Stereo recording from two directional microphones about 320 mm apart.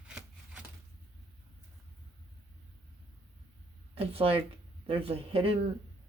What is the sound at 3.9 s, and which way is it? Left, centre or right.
Speech, centre.